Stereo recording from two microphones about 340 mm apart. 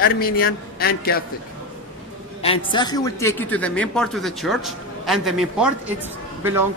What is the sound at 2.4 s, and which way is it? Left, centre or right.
A man's voice, centre.